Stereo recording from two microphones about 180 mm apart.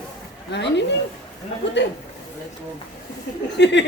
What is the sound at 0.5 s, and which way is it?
Speech, 75° left (ahead or behind).